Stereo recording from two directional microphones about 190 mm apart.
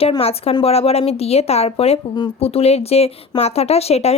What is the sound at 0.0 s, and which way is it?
A woman's voice, 30° left (ahead or behind).